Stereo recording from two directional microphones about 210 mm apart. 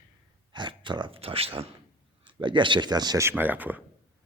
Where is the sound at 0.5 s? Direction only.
20° right (ahead or behind).